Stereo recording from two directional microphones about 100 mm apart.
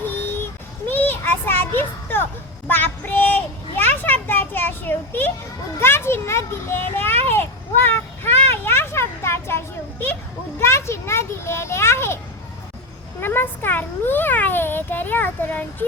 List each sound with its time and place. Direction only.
0.0 s a sound: 20° left (ahead or behind)
0.9 s children playing: 20° left (ahead or behind)
2.6 s child singing: 20° left (ahead or behind)
3.8 s children playing: 20° left (ahead or behind)
5.8 s a child's voice: 25° left (ahead or behind)
7.9 s vehicle: 25° left (ahead or behind)
10.6 s a child's voice: 25° left (ahead or behind)